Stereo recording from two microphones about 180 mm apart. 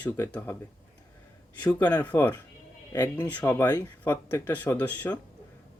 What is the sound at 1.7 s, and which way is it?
Speech, 15° left (ahead or behind).